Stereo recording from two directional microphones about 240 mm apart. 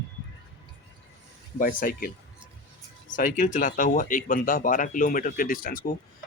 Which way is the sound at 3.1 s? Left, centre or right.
Left.